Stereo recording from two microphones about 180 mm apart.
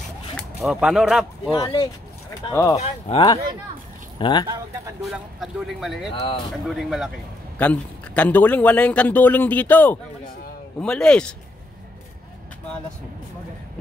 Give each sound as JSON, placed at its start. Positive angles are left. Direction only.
{"t": 0.7, "sound": "speech", "side_deg": -5}
{"t": 2.5, "sound": "a man's voice", "side_deg": 15}
{"t": 2.8, "sound": "speech", "side_deg": 35}
{"t": 5.0, "sound": "speech", "side_deg": 0}
{"t": 6.1, "sound": "speech", "side_deg": 30}
{"t": 6.5, "sound": "a man's voice", "side_deg": 0}